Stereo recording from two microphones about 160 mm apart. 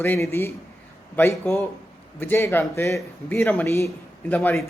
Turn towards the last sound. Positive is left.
turn(degrees=10)  # may be behind; listen again after turning